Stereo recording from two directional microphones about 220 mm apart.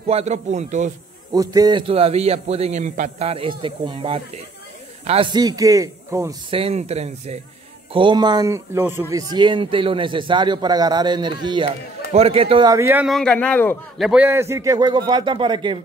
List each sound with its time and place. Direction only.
0.1 s a man's voice: 30° right (ahead or behind)
1.3 s a man's voice: 15° right (ahead or behind)
6.5 s a man's voice: 30° right (ahead or behind); by 14.0 s 10° left (ahead or behind)
14.0 s a man's voice: 5° right (ahead or behind)